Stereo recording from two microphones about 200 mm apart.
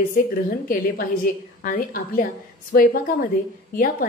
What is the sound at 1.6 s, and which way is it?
A woman's voice, 45° left (ahead or behind).